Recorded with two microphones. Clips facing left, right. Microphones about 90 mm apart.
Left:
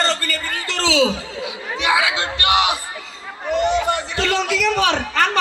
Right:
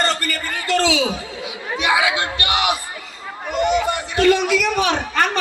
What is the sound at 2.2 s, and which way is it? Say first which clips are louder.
Speech: left 3 dB; 25° left (ahead or behind).